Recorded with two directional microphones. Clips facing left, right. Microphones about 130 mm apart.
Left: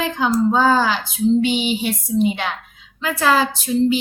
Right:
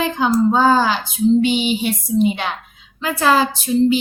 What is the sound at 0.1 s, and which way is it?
Speech, 30° right (ahead or behind).